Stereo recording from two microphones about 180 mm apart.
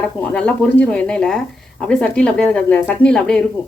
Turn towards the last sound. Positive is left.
turn(degrees=5)  # may be behind; listen again after turning